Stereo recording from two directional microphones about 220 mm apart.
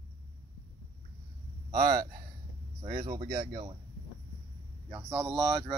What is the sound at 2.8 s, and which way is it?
Speech, 30° right (ahead or behind).